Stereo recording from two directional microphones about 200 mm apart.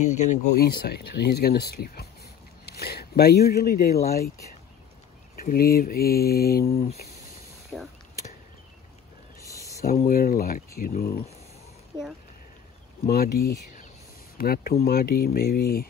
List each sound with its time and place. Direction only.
0.0 s speech: 35° left (ahead or behind)
0.6 s speech: 50° left (ahead or behind)
5.3 s speech: 45° left (ahead or behind)
6.7 s speech: 30° left (ahead or behind)
10.0 s speech: 45° left (ahead or behind)
13.1 s speech: 50° left (ahead or behind)